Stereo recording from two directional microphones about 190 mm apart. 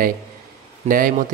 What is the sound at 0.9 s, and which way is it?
Speech, 35° right (ahead or behind).